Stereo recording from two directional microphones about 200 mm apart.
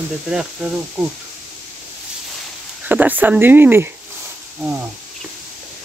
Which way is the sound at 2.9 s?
10° right (ahead or behind).